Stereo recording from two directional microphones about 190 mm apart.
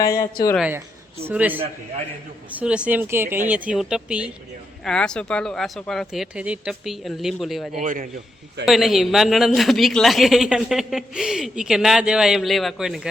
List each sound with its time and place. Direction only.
1.2 s speech: 10° right (ahead or behind)
7.8 s a man's voice: 45° right (ahead or behind)
8.6 s speech: centre (ahead or behind)